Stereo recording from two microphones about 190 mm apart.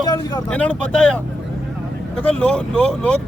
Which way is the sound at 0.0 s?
20° left (ahead or behind).